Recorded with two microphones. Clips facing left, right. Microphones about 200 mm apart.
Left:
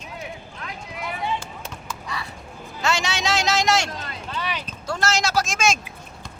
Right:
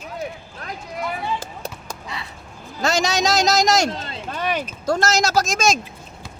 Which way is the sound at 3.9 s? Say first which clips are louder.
Right 4 dB; 25° right (ahead or behind).